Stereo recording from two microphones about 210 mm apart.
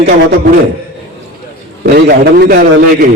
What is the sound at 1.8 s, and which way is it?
Speech, 45° right (ahead or behind).